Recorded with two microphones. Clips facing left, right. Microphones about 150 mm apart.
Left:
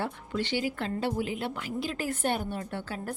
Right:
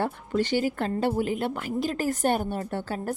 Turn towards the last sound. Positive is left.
turn(degrees=-40)  # may be behind; listen again after turning